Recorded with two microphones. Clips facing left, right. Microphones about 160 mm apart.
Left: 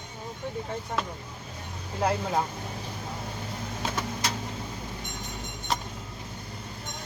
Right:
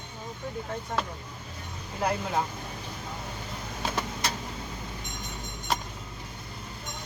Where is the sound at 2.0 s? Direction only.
30° left (ahead or behind).